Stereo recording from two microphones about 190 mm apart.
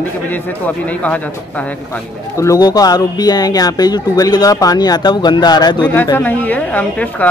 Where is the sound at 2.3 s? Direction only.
15° left (ahead or behind).